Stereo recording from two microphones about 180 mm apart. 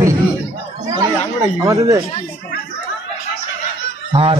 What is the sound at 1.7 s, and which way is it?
Speech, 20° right (ahead or behind).